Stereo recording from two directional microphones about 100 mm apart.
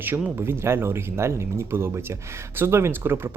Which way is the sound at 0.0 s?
20° right (ahead or behind).